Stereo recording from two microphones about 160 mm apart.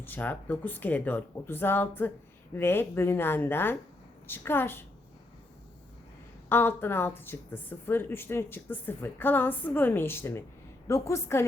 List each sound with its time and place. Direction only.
0.0 s speech: 10° left (ahead or behind)
6.5 s speech: 15° left (ahead or behind)